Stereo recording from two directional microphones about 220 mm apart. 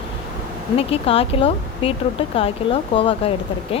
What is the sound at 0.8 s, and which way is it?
Speech, 25° left (ahead or behind).